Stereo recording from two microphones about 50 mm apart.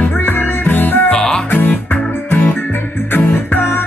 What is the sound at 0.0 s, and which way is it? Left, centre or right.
Music, left.